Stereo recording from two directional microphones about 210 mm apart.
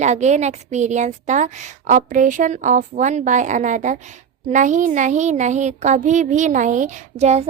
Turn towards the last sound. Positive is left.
turn(degrees=-30)  # may be behind; listen again after turning